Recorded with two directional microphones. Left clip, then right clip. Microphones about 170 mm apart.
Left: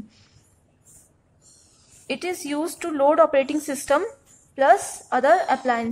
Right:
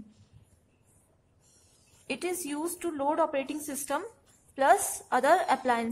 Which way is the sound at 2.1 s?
10° left (ahead or behind).